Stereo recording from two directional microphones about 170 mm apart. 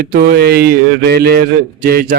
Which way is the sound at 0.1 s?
65° right (ahead or behind).